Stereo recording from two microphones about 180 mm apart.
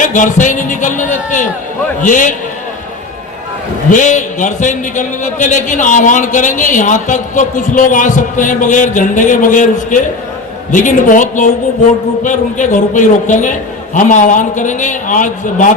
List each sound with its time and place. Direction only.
0.1 s a man's voice: 45° left (ahead or behind)
3.9 s a man's voice: 45° left (ahead or behind)